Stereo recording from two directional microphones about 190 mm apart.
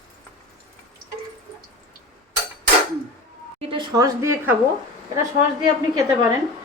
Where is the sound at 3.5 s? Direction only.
30° right (ahead or behind).